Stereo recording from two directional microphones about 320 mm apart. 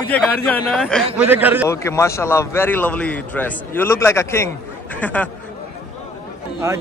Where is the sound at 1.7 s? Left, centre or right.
Centre.